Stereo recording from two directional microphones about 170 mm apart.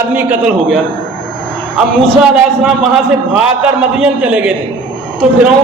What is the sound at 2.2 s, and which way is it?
A man's voice, 5° right (ahead or behind).